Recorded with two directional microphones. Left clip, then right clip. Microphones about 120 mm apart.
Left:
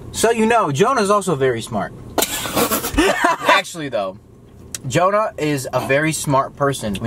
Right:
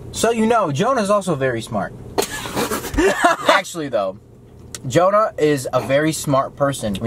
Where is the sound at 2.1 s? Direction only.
15° left (ahead or behind).